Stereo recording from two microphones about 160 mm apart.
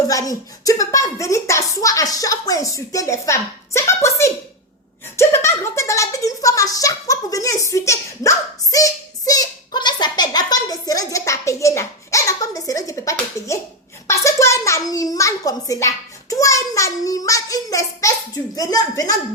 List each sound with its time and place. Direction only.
0.1 s speech: 20° left (ahead or behind)